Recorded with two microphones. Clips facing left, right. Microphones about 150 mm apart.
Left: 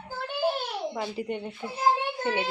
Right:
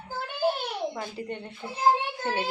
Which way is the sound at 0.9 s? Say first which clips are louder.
Left 3 dB; 15° left (ahead or behind).